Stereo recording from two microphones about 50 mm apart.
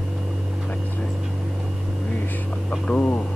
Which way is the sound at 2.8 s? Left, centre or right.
Centre.